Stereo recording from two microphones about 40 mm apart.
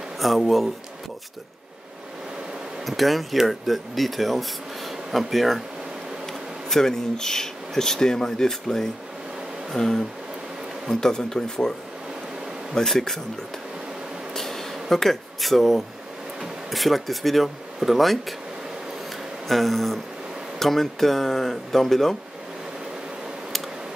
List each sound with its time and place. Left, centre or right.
0.2 s speech: centre
2.8 s speech: centre
6.2 s speech: centre
12.7 s speech: centre
14.3 s a sound: centre
16.3 s speech: centre
19.4 s speech: centre